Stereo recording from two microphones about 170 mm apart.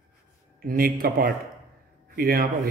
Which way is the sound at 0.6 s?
60° right (ahead or behind).